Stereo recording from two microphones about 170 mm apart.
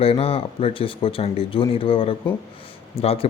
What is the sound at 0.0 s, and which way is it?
Speech, 35° left (ahead or behind).